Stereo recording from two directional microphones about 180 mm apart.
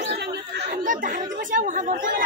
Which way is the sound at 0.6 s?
50° right (ahead or behind).